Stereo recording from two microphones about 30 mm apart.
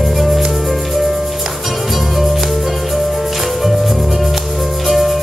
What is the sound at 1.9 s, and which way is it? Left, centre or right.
Music, centre.